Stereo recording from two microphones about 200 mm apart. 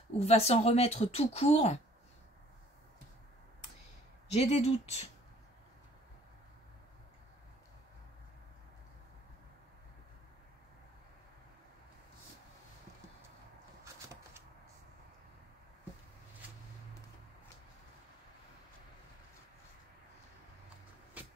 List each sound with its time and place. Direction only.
0.2 s speech: 30° left (ahead or behind)
4.3 s speech: 30° left (ahead or behind)
21.2 s vehicle: 5° right (ahead or behind)